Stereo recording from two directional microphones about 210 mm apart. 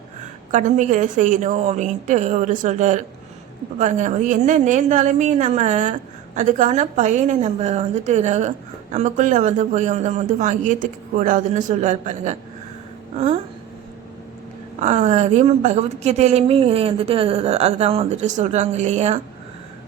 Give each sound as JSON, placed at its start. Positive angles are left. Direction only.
{"t": 0.5, "sound": "a woman's voice", "side_deg": -35}
{"t": 14.8, "sound": "a woman's voice", "side_deg": -35}